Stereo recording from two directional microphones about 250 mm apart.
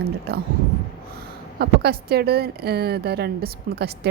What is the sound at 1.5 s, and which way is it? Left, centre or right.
A woman's voice, right.